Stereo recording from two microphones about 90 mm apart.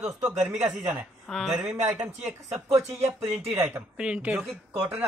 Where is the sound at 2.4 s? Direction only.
35° right (ahead or behind).